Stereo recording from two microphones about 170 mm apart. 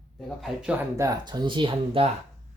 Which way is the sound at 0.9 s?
20° right (ahead or behind).